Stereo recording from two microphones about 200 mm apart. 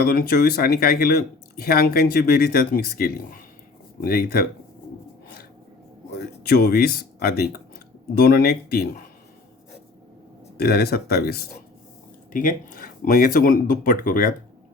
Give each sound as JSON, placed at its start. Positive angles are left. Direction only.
{"t": 0.0, "sound": "speech", "side_deg": 50}
{"t": 6.1, "sound": "speech", "side_deg": 50}
{"t": 10.6, "sound": "speech", "side_deg": 50}
{"t": 12.3, "sound": "speech", "side_deg": 40}